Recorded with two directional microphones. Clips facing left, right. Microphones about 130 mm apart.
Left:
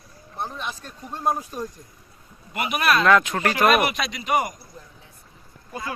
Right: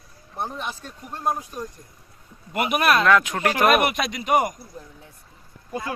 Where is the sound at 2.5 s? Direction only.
50° right (ahead or behind).